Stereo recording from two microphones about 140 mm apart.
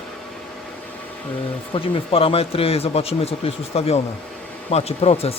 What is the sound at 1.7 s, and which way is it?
Speech, 40° left (ahead or behind).